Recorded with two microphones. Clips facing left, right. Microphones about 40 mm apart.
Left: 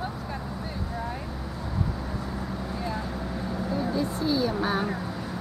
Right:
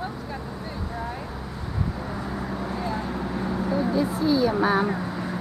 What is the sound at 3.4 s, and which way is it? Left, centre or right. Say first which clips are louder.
Vehicle: right 4 dB; centre.